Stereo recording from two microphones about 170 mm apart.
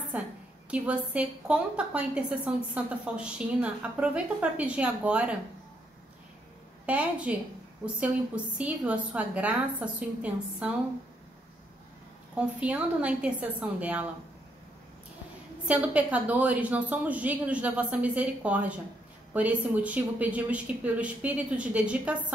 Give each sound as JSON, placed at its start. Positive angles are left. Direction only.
{"t": 0.1, "sound": "a sound", "side_deg": -10}
{"t": 0.7, "sound": "a woman's voice", "side_deg": -5}
{"t": 6.9, "sound": "a woman's voice", "side_deg": -5}
{"t": 8.5, "sound": "a woman's voice", "side_deg": -10}
{"t": 12.4, "sound": "a woman's voice", "side_deg": -10}
{"t": 15.6, "sound": "a woman's voice", "side_deg": -10}